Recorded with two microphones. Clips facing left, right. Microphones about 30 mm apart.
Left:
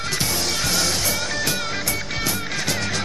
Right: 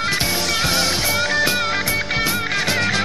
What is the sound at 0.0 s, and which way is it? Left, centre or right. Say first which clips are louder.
Music: right 4 dB; right.